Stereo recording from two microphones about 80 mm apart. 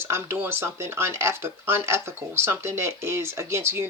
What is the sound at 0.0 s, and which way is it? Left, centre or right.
Speech, right.